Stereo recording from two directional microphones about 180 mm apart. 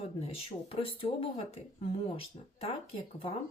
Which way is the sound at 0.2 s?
35° left (ahead or behind).